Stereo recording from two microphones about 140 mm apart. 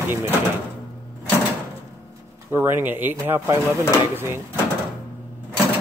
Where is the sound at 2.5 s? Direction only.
15° right (ahead or behind).